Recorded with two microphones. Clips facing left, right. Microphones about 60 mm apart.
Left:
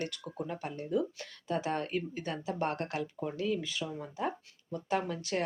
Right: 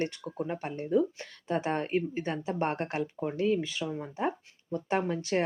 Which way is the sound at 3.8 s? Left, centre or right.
Centre.